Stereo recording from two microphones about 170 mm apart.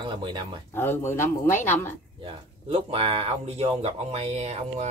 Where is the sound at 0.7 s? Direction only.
15° left (ahead or behind).